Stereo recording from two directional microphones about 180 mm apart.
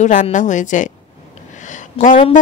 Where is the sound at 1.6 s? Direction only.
45° left (ahead or behind).